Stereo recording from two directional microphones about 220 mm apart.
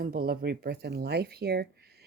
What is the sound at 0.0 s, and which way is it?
Speech, 45° right (ahead or behind).